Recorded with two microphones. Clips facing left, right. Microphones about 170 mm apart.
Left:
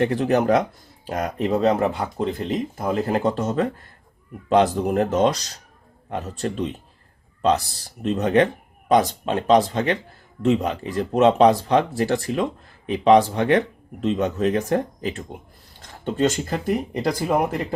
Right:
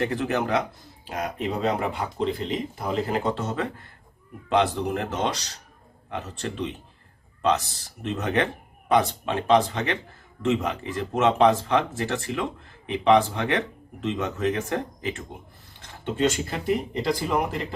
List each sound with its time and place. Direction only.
0.0 s speech: 35° left (ahead or behind)